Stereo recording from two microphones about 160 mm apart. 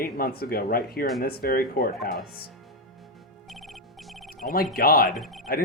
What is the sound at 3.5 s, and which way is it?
Music, centre (ahead or behind).